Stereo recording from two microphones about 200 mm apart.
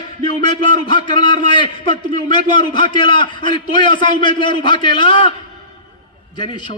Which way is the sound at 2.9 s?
25° left (ahead or behind).